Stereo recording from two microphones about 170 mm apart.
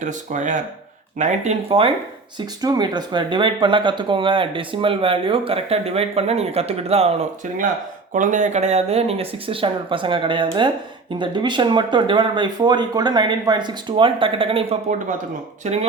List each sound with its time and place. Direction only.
0.0 s speech: 45° right (ahead or behind)
2.6 s speech: 25° right (ahead or behind); by 15.9 s 40° right (ahead or behind)